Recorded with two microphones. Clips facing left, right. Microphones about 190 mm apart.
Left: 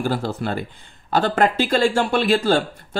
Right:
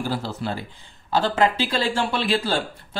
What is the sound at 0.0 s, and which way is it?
Speech, 50° left (ahead or behind).